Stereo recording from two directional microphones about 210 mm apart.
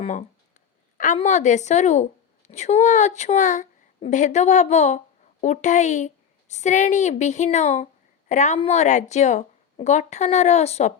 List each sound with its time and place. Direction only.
0.0 s a woman's voice: 35° left (ahead or behind)